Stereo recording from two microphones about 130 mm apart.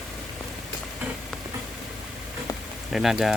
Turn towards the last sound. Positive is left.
turn(degrees=-5)  # may be behind; listen again after turning